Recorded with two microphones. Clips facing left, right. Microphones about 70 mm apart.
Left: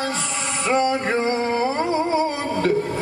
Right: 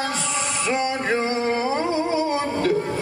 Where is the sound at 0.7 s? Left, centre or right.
Left.